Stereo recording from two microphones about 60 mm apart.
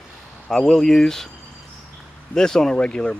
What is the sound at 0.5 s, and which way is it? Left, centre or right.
Speech, centre.